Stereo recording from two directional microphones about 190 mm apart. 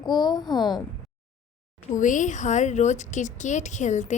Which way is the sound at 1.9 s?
40° left (ahead or behind).